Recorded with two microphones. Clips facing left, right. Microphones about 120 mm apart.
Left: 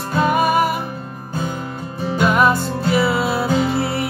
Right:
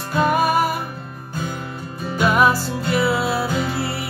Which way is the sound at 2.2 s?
Centre (ahead or behind).